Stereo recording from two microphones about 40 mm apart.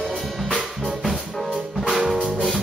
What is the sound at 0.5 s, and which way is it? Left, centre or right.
Drum kit, centre.